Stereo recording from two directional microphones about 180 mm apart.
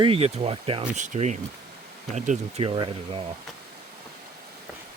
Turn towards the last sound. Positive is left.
turn(degrees=-30)  # may be behind; listen again after turning